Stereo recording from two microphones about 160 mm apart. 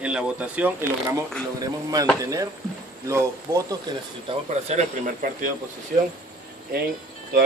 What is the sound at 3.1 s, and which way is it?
Speech, 15° right (ahead or behind).